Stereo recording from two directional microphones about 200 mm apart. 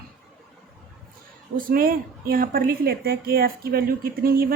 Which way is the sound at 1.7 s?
45° right (ahead or behind).